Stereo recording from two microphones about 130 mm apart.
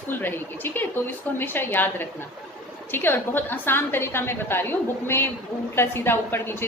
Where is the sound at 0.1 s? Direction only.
15° left (ahead or behind).